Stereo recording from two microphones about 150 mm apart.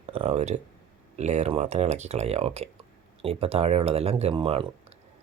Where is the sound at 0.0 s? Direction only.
45° right (ahead or behind).